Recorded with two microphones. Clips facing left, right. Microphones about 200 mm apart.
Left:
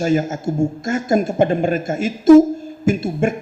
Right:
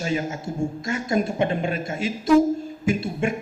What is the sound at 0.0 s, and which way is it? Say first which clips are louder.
A man's voice: left 8 dB; 45° left (ahead or behind).